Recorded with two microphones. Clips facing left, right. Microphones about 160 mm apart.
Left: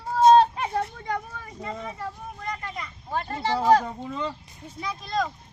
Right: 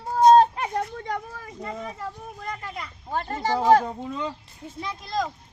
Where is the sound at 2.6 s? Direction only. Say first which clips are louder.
Even; 5° right (ahead or behind).